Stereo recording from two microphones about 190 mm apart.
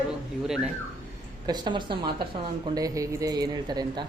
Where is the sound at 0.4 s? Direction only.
5° right (ahead or behind).